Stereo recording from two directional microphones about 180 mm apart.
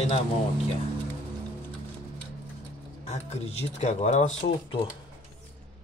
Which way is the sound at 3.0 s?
35° left (ahead or behind).